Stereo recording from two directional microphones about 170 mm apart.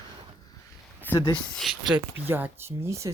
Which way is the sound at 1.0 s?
10° left (ahead or behind).